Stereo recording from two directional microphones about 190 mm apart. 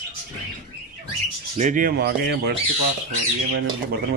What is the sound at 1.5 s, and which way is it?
Speech, 40° right (ahead or behind).